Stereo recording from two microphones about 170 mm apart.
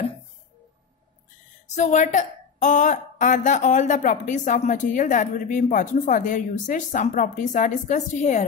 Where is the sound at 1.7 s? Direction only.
45° left (ahead or behind).